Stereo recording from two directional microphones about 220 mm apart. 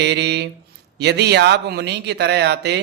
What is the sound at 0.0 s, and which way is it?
A man's voice, 50° right (ahead or behind).